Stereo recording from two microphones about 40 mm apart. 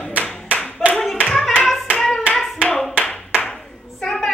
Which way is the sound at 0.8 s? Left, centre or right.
Centre.